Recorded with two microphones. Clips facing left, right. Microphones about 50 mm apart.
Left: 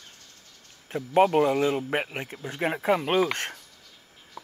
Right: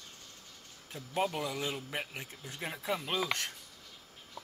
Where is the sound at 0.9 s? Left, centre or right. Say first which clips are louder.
Left 13 dB; left.